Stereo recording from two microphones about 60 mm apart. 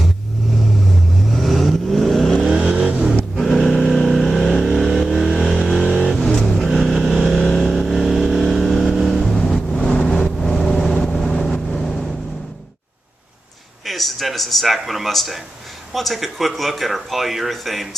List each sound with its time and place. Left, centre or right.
1.4 s vehicle: centre
2.4 s vehicle: centre
3.3 s vehicle: centre
13.8 s speech: centre